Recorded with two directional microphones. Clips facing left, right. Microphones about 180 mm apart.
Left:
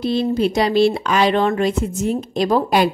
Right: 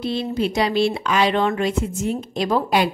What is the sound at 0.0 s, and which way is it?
A woman's voice, 40° left (ahead or behind).